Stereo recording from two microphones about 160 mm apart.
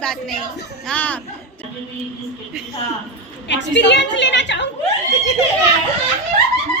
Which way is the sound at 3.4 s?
90° left.